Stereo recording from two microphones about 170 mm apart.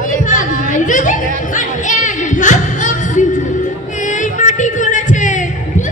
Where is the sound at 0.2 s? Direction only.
50° left (ahead or behind).